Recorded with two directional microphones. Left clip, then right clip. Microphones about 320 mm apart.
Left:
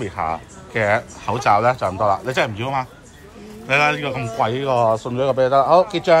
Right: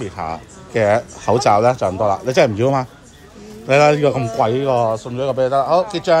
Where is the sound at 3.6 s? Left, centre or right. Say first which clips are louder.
Right 5 dB; centre.